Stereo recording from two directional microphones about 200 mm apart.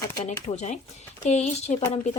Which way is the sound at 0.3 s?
35° left (ahead or behind).